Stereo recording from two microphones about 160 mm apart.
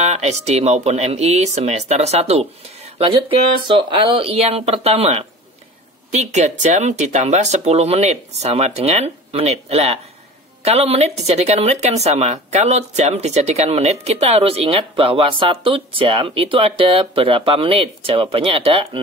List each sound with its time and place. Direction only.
0.0 s speech: 45° right (ahead or behind)